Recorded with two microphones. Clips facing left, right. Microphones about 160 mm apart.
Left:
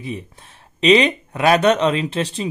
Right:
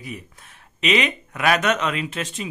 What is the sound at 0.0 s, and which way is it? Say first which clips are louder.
Speech: left 6 dB; 30° left (ahead or behind).